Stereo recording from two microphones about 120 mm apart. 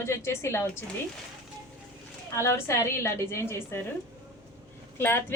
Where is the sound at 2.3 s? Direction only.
25° left (ahead or behind).